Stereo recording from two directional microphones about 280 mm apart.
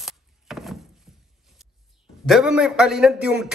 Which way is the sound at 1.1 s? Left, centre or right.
Centre.